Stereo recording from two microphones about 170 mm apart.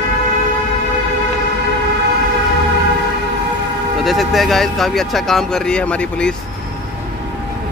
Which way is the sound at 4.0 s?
Centre (ahead or behind).